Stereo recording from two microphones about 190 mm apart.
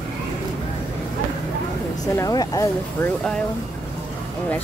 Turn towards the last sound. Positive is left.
turn(degrees=5)  # may be behind; listen again after turning